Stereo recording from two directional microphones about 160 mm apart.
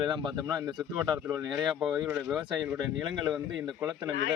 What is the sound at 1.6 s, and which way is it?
Speech, centre (ahead or behind).